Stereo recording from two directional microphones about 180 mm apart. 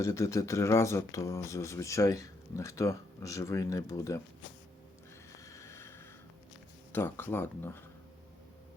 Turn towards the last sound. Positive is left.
turn(degrees=10)  # may be behind; listen again after turning